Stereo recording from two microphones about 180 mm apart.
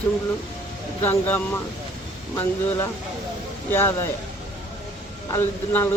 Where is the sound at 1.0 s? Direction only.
10° left (ahead or behind).